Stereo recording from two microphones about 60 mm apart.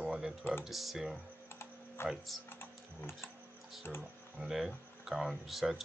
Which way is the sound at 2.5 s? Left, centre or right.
Left.